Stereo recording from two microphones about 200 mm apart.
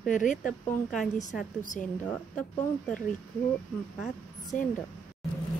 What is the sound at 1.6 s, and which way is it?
Speech, 40° left (ahead or behind).